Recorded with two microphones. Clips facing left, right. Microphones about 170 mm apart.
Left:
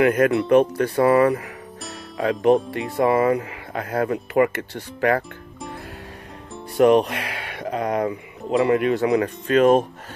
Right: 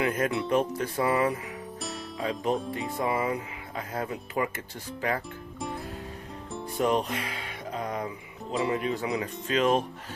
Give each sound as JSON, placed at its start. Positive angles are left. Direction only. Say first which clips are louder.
{"t": 0.0, "sound": "speech", "louder": "left 9 dB", "side_deg": 65}
{"t": 6.8, "sound": "speech", "louder": "left 11 dB", "side_deg": 70}